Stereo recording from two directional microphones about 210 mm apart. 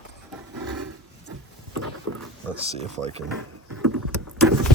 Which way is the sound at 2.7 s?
30° right (ahead or behind).